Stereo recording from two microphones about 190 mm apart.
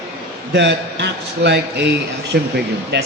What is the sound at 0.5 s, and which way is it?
A man's voice, 65° right (ahead or behind).